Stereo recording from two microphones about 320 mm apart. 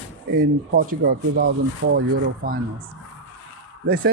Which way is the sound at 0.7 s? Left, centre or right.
Right.